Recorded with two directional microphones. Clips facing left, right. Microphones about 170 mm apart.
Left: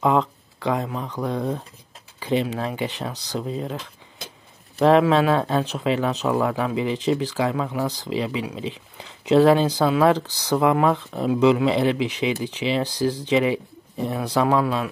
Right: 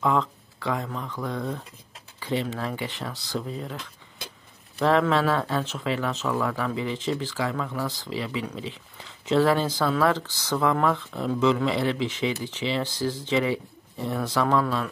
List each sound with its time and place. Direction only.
0.0 s speech: 20° left (ahead or behind)
2.1 s speech: 15° left (ahead or behind)
4.8 s speech: 20° left (ahead or behind)